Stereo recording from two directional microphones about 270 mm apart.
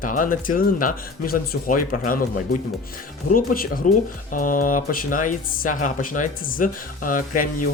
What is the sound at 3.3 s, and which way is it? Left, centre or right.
Speech, left.